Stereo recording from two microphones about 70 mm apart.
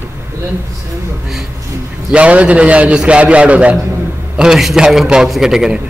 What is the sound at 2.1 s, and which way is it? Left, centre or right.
A man's voice, centre.